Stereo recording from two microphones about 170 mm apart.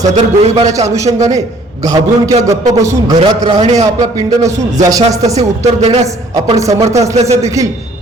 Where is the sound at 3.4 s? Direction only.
40° right (ahead or behind).